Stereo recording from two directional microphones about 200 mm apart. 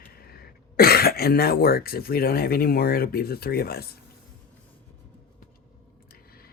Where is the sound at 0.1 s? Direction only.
50° left (ahead or behind).